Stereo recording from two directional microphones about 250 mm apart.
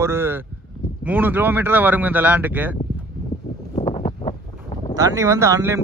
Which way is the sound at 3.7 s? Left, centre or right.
Left.